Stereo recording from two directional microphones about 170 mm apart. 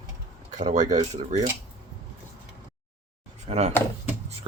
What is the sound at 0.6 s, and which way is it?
Speech, 45° right (ahead or behind).